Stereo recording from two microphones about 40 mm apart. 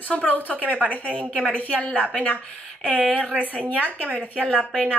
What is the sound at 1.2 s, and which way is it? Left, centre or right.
Speech, right.